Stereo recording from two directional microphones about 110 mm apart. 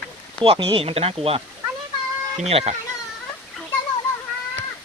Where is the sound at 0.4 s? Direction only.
55° right (ahead or behind).